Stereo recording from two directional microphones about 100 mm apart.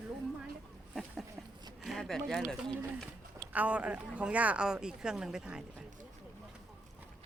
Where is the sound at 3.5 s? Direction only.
15° right (ahead or behind).